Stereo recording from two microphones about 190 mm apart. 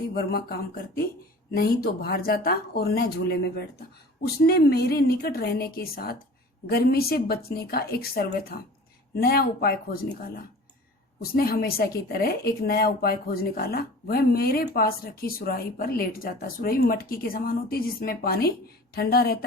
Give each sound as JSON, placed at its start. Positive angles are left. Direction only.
{"t": 0.1, "sound": "a woman's voice", "side_deg": 55}
{"t": 4.4, "sound": "a woman's voice", "side_deg": 55}